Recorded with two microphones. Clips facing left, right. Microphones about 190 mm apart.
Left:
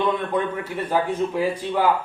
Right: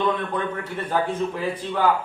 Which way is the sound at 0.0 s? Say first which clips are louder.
Left 2 dB; 10° left (ahead or behind).